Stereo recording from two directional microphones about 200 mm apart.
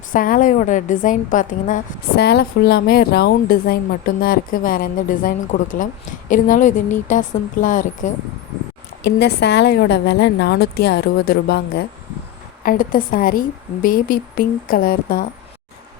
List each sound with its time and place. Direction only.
0.1 s a woman's voice: 45° left (ahead or behind)
9.0 s a woman's voice: 55° left (ahead or behind)